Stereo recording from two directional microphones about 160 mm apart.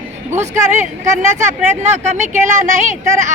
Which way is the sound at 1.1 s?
50° right (ahead or behind).